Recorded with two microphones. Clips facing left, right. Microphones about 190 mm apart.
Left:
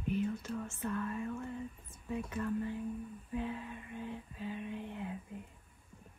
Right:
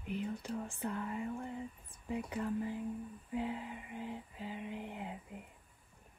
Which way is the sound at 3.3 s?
20° right (ahead or behind).